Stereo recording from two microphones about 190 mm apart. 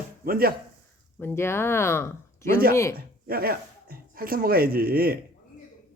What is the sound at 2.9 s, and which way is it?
Speech, 50° right (ahead or behind).